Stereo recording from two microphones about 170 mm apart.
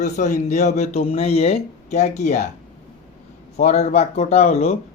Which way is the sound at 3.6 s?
40° left (ahead or behind).